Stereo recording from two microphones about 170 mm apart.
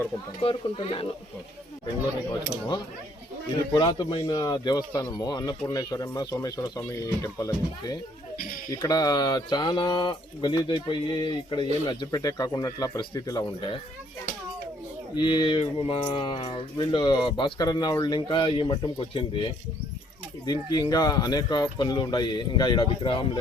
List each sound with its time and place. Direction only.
0.4 s speech: 30° left (ahead or behind)
2.3 s speech: 25° left (ahead or behind)
15.1 s speech: 30° left (ahead or behind)
20.4 s speech: 25° left (ahead or behind)